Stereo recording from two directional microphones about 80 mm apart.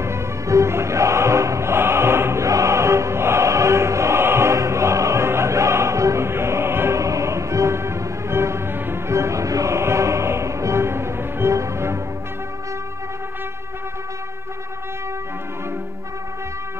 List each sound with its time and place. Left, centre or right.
0.0 s music: right